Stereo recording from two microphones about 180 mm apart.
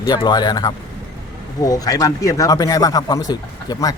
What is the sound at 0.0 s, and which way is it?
A man's voice, 25° left (ahead or behind).